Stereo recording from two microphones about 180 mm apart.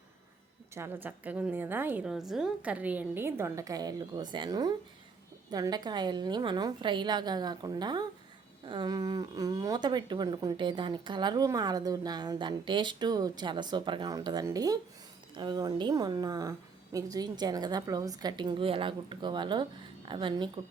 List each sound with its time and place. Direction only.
0.7 s a woman's voice: 10° right (ahead or behind)